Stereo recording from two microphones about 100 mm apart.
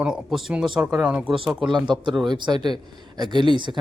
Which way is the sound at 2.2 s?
50° right (ahead or behind).